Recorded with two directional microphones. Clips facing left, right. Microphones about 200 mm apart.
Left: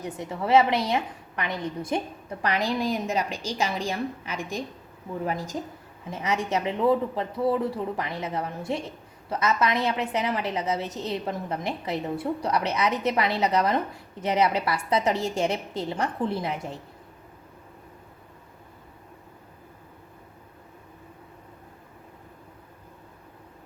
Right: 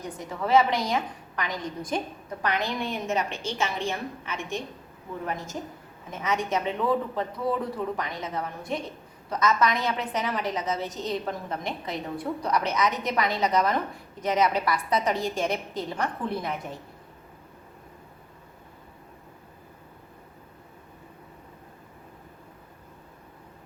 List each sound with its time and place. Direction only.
0.2 s a woman's voice: 25° left (ahead or behind)